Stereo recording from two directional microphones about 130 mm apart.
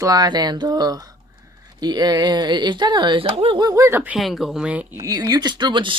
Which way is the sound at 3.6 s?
25° right (ahead or behind).